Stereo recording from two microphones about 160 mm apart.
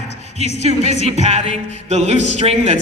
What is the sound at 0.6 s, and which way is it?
A man's voice, 45° right (ahead or behind).